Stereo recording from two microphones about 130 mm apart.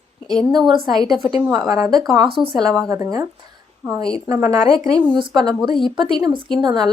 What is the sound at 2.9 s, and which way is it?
Speech, 25° right (ahead or behind).